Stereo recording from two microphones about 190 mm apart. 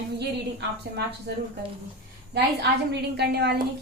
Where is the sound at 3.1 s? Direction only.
60° right (ahead or behind).